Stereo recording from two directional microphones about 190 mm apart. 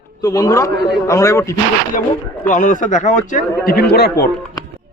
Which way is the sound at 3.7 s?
55° left (ahead or behind).